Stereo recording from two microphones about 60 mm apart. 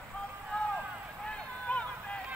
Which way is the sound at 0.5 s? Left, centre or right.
Left.